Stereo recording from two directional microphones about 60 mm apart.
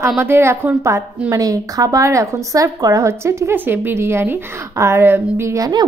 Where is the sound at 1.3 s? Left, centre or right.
Right.